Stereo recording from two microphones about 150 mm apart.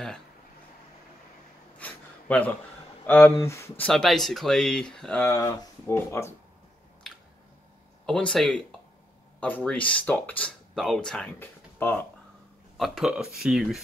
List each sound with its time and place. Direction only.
1.8 s a sound: 10° left (ahead or behind)
3.1 s speech: 10° left (ahead or behind)
3.8 s speech: 5° left (ahead or behind)
5.3 s speech: 20° left (ahead or behind)
7.0 s a sound: 5° left (ahead or behind)
8.1 s speech: 5° left (ahead or behind)
12.7 s speech: centre (ahead or behind)